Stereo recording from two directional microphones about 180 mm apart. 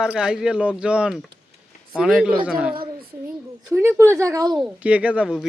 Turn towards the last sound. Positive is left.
turn(degrees=-5)  # may be behind; listen again after turning